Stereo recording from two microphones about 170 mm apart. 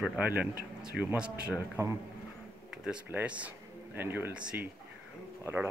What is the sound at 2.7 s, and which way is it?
Speech, 5° right (ahead or behind).